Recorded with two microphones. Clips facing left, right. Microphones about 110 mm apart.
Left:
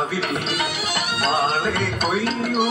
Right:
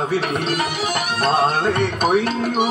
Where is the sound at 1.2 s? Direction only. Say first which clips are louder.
Right 4 dB; 50° right (ahead or behind).